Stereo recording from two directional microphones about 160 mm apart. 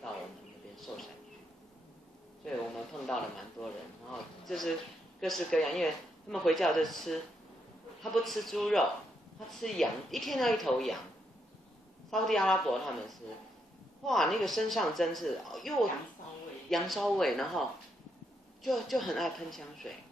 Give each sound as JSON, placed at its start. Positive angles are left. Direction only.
{"t": 0.7, "sound": "a sound", "side_deg": 0}
{"t": 2.4, "sound": "speech", "side_deg": 0}
{"t": 12.1, "sound": "speech", "side_deg": 5}
{"t": 14.0, "sound": "speech", "side_deg": 0}